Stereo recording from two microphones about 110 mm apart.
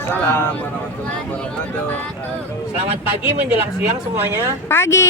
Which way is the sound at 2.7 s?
70° right (ahead or behind).